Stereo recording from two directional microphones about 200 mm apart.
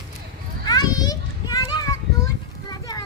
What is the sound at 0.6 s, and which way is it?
Children playing, 20° left (ahead or behind).